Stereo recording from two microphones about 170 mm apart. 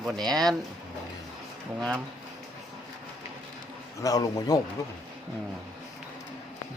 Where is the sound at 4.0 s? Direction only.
20° left (ahead or behind).